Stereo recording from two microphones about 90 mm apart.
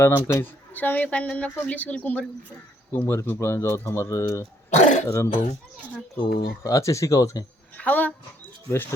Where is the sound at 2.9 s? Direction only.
30° left (ahead or behind).